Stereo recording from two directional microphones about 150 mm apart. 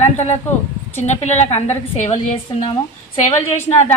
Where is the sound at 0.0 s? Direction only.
50° left (ahead or behind).